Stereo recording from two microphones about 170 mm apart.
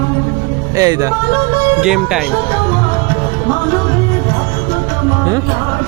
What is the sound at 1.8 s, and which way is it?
Speech, 5° right (ahead or behind).